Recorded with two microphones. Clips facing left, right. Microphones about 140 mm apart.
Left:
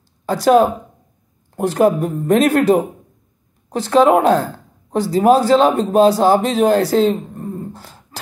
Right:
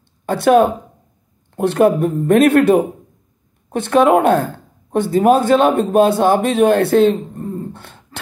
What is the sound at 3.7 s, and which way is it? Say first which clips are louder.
A man's voice: even; 55° right (ahead or behind).